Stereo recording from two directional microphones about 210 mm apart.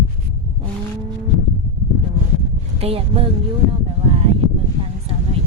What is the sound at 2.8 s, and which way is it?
Speech, 30° right (ahead or behind).